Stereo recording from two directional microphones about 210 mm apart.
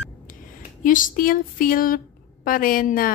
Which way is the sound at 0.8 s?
40° left (ahead or behind).